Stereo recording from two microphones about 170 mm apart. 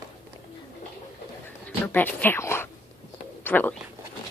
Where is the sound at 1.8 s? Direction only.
10° left (ahead or behind).